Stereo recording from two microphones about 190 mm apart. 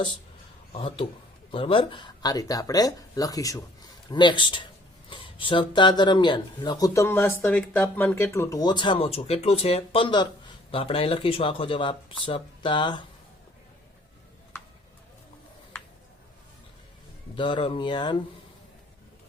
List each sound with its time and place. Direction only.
0.7 s speech: 25° left (ahead or behind)
17.3 s speech: 25° left (ahead or behind)